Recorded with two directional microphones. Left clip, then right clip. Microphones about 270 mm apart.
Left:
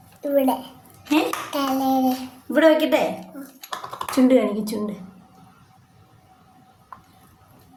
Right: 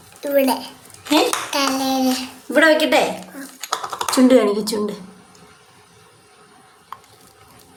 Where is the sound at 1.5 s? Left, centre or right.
Centre.